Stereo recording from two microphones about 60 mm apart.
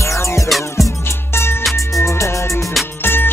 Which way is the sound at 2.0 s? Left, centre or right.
Left.